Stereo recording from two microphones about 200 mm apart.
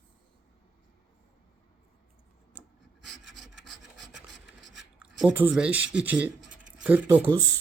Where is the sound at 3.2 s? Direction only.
65° right (ahead or behind).